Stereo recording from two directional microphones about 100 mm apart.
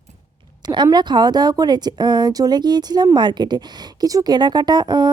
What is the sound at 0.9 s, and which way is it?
A woman's voice, 45° right (ahead or behind).